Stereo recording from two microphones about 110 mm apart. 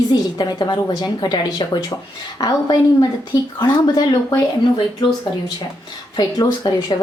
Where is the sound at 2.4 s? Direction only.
40° left (ahead or behind).